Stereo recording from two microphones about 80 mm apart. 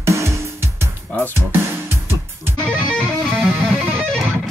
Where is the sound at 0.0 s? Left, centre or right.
Right.